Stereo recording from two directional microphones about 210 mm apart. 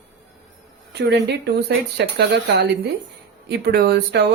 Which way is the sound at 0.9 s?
50° right (ahead or behind).